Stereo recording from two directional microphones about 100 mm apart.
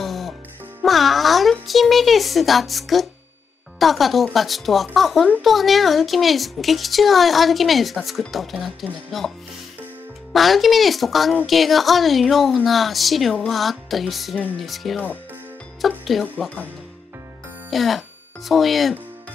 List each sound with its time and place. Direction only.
0.0 s music: centre (ahead or behind)
0.8 s a woman's voice: centre (ahead or behind)
10.3 s a woman's voice: centre (ahead or behind)
17.6 s speech: centre (ahead or behind)